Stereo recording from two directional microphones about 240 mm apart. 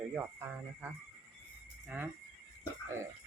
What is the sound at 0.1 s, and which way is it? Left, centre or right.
Speech, centre.